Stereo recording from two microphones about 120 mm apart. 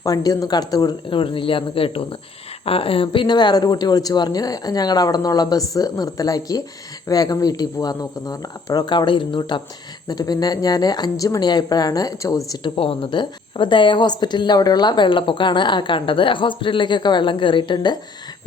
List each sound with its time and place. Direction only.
0.0 s speech: 30° left (ahead or behind)
12.7 s speech: 50° left (ahead or behind)